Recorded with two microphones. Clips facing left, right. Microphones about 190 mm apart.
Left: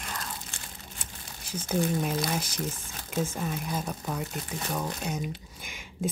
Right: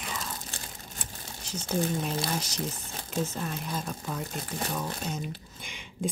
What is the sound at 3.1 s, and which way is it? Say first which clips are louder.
Speech: left 1 dB; 10° left (ahead or behind).